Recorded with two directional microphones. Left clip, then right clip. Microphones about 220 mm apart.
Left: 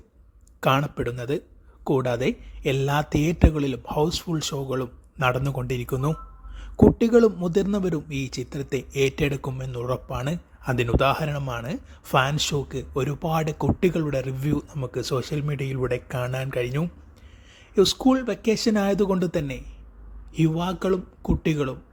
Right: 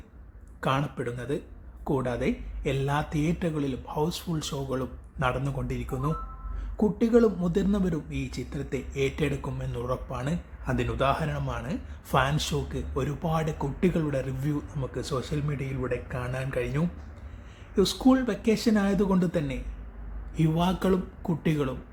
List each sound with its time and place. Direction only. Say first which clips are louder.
0.6 s speech: left 6 dB; 35° left (ahead or behind)